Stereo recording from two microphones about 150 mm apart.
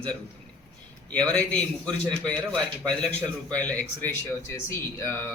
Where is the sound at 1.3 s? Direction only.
10° left (ahead or behind).